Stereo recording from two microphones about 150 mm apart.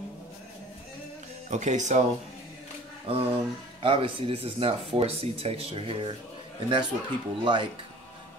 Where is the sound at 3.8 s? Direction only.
35° right (ahead or behind).